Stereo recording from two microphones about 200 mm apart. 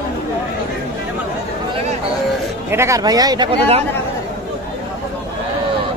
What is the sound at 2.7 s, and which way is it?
Speech, 15° right (ahead or behind).